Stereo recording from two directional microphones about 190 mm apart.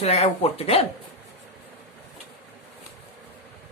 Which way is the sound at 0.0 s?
35° left (ahead or behind).